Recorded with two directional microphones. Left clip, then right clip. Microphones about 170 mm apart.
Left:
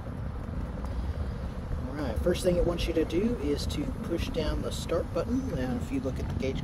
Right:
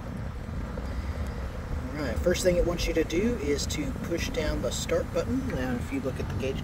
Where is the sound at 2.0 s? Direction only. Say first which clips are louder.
Right 3 dB; 10° left (ahead or behind).